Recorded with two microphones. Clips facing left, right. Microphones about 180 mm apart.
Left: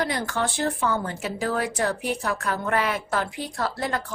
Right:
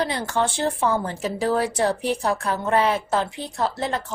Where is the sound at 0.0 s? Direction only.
30° right (ahead or behind).